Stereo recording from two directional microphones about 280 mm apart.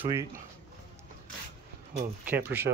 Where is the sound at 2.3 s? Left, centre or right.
Centre.